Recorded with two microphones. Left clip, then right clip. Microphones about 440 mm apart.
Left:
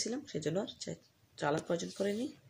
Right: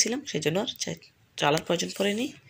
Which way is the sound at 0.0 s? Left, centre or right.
Right.